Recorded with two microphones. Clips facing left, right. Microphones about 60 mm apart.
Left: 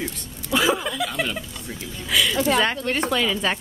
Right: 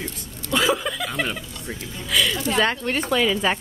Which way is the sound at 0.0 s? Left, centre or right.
Centre.